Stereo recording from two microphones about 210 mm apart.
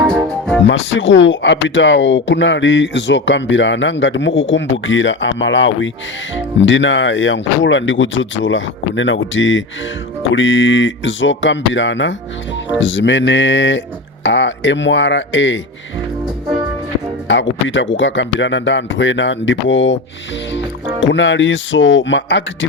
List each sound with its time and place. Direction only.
0.7 s speech: 60° left (ahead or behind)
17.2 s speech: 60° left (ahead or behind)
21.0 s speech: 60° left (ahead or behind)